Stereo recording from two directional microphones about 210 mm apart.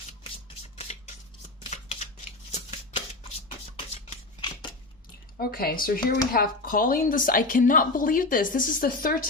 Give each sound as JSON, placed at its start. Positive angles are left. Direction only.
{"t": 0.8, "sound": "a sound", "side_deg": 30}
{"t": 1.6, "sound": "shuffling cards", "side_deg": 30}
{"t": 4.1, "sound": "scissors", "side_deg": 25}
{"t": 5.4, "sound": "speech", "side_deg": 45}